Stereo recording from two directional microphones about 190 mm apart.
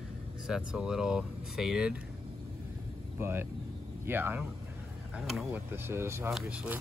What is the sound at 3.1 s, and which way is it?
Speech, 10° right (ahead or behind).